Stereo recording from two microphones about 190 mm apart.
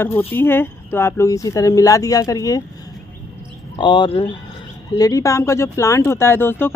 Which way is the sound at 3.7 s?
25° left (ahead or behind).